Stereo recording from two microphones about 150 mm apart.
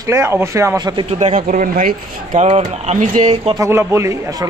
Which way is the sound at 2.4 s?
45° right (ahead or behind).